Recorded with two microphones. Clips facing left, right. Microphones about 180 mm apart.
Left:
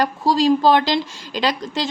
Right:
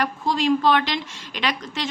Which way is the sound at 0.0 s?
35° left (ahead or behind).